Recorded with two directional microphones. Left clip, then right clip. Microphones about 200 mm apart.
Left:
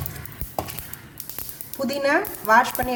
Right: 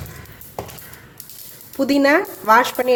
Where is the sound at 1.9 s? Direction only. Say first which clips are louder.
Right 6 dB; 40° right (ahead or behind).